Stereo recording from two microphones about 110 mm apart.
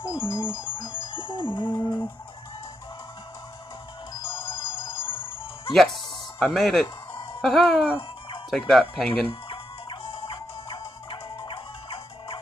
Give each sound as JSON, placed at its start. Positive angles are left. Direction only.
{"t": 0.1, "sound": "music", "side_deg": 45}
{"t": 4.1, "sound": "music", "side_deg": 45}
{"t": 5.7, "sound": "speech", "side_deg": 0}
{"t": 9.3, "sound": "music", "side_deg": 55}